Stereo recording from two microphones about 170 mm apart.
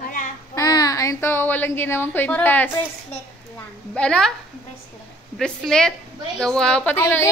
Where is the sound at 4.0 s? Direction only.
5° left (ahead or behind).